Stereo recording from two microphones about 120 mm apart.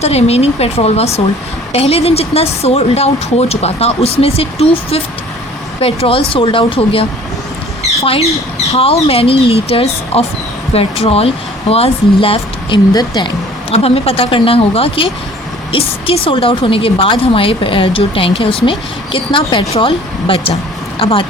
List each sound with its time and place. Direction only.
0.0 s a woman's voice: 60° left (ahead or behind)
7.8 s squawk: 50° left (ahead or behind)
8.7 s a woman's voice: 55° left (ahead or behind)
12.9 s speech: 35° left (ahead or behind)
13.7 s a woman's voice: 55° left (ahead or behind)